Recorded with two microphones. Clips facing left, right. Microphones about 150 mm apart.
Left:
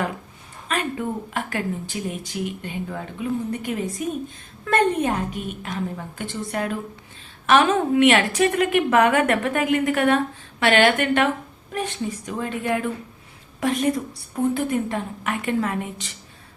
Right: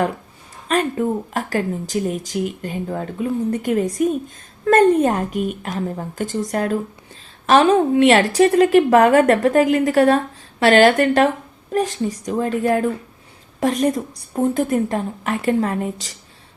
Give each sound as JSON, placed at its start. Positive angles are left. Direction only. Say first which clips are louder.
{"t": 0.7, "sound": "a woman's voice", "louder": "right 6 dB", "side_deg": -40}